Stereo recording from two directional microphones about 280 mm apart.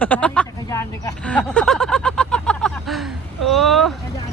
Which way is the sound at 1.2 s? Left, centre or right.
Centre.